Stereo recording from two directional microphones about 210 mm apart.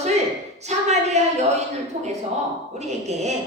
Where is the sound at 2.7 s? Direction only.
30° right (ahead or behind).